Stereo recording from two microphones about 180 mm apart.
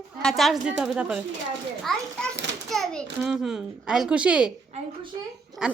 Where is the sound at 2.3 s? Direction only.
80° right.